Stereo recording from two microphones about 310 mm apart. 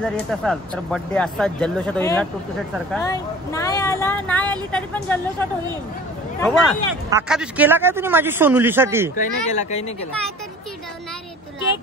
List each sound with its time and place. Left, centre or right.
0.0 s a man's voice: centre
9.1 s speech: left